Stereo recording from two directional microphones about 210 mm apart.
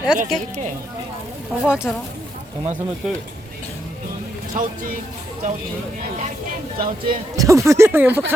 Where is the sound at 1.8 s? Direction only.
5° left (ahead or behind).